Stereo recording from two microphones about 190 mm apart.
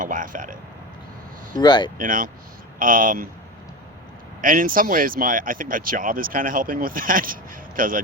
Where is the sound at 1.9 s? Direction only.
45° right (ahead or behind).